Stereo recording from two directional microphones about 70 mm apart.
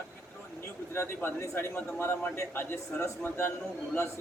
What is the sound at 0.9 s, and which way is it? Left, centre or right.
A man's voice, left.